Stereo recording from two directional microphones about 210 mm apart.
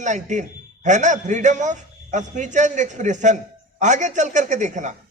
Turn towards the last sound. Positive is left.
turn(degrees=-35)  # may be behind; listen again after turning